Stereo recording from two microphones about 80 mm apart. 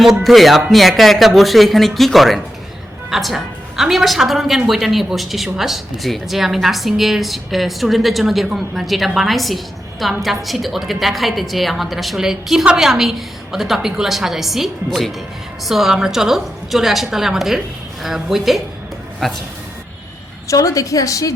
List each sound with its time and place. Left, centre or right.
0.0 s a woman's voice: centre
20.5 s a woman's voice: left